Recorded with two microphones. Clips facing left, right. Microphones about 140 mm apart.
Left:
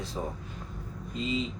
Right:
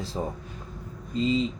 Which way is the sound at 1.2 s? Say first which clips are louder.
Right 7 dB; 35° right (ahead or behind).